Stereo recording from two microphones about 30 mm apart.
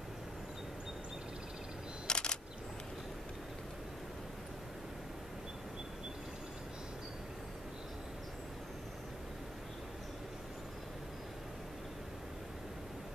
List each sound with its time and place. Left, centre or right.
2.0 s single-lens reflex camera: left